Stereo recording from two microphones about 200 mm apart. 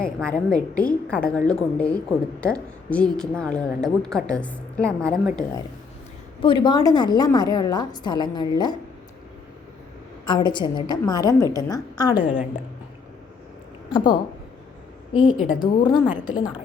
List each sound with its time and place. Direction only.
0.0 s a woman's voice: 5° left (ahead or behind)
6.4 s a woman's voice: 25° left (ahead or behind)
10.2 s a woman's voice: 20° left (ahead or behind)
13.9 s a woman's voice: 20° left (ahead or behind)